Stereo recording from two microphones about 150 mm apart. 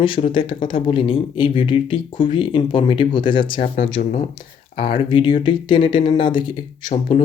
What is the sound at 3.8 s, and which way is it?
Speech, 65° left (ahead or behind).